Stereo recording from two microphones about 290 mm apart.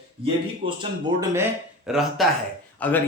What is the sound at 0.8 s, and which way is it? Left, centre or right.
Speech, centre.